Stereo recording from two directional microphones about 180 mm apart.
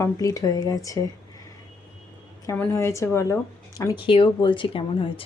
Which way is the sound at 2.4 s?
15° left (ahead or behind).